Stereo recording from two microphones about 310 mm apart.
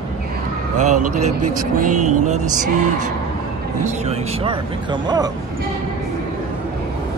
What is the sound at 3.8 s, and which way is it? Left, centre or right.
Speech, centre.